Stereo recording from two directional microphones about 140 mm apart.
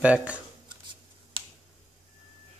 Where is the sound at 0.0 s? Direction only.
10° right (ahead or behind).